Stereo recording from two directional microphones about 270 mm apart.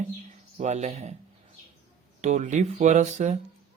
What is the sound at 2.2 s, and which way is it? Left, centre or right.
Speech, right.